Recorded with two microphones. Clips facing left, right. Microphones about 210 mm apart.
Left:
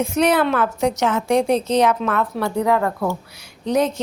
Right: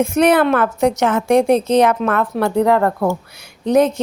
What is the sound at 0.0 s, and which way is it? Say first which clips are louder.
A woman's voice: right 4 dB; 55° right (ahead or behind).